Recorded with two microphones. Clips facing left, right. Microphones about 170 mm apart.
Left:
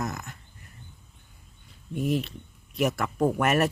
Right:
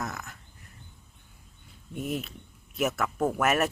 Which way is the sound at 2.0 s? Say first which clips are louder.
Left 5 dB; centre (ahead or behind).